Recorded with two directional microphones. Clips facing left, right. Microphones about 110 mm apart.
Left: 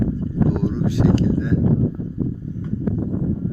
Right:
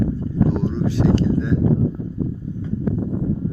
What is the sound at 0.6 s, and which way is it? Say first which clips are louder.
Speech: even; 10° left (ahead or behind).